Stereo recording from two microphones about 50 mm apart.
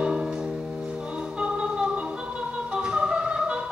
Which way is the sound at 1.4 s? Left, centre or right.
Centre.